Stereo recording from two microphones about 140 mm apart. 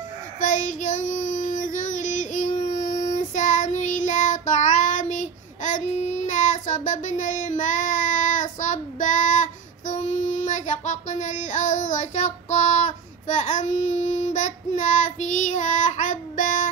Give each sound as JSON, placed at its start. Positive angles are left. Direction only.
{"t": 0.4, "sound": "child singing", "side_deg": 65}